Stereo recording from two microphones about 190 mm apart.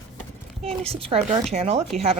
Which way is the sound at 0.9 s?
30° right (ahead or behind).